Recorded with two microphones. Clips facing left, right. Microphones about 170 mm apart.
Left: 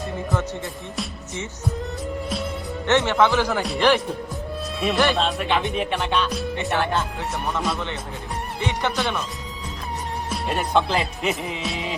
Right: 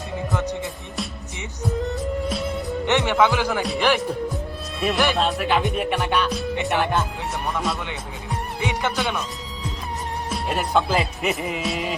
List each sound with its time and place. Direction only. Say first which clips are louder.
0.3 s speech: right 2 dB; 15° right (ahead or behind)
1.8 s music: right 4 dB; centre (ahead or behind)
2.8 s speech: left 1 dB; 15° right (ahead or behind)
6.6 s speech: right 1 dB; 15° right (ahead or behind)
7.5 s speech: left 1 dB; 5° right (ahead or behind)
10.2 s speech: even; centre (ahead or behind)